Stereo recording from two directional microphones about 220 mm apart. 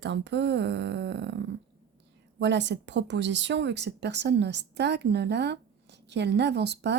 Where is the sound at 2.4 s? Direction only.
55° right (ahead or behind).